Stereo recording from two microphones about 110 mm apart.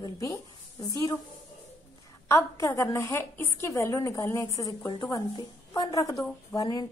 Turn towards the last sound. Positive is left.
turn(degrees=35)  # may be behind; listen again after turning